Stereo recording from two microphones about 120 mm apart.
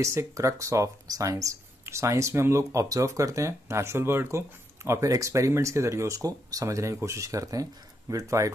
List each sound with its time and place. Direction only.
0.0 s speech: 25° right (ahead or behind)